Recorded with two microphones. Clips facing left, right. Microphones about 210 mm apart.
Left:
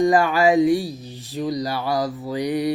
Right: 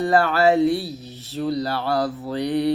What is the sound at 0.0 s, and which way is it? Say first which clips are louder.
Speech: left 1 dB; 15° left (ahead or behind).